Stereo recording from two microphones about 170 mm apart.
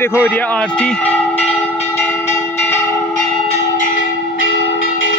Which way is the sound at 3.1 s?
50° left (ahead or behind).